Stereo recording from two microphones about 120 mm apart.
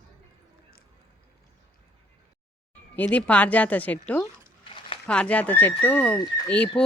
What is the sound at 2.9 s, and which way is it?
A woman's voice, 10° left (ahead or behind).